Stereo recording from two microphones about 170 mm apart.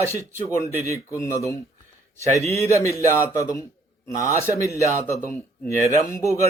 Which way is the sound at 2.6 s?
15° left (ahead or behind).